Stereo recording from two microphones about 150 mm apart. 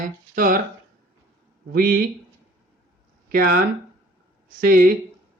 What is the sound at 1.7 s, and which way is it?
Speech, 80° right.